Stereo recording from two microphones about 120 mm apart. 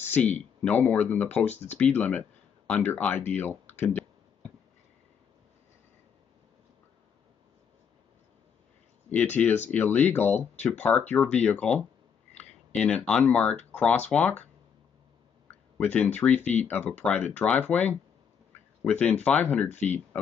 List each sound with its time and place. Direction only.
0.0 s speech: 15° left (ahead or behind)
9.1 s speech: 10° left (ahead or behind)
15.8 s speech: 15° left (ahead or behind)
19.7 s speech: 75° left (ahead or behind)